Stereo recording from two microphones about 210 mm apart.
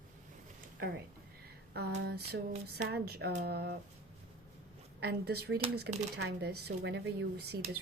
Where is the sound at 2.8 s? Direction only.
50° right (ahead or behind).